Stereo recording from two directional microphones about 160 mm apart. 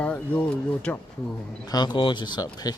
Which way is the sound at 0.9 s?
10° left (ahead or behind).